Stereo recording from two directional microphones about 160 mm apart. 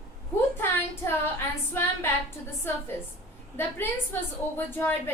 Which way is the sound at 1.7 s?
15° left (ahead or behind).